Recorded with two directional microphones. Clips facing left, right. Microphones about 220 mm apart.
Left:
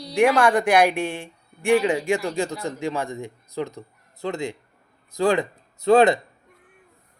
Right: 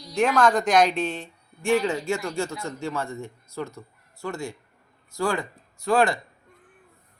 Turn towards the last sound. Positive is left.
turn(degrees=20)  # may be behind; listen again after turning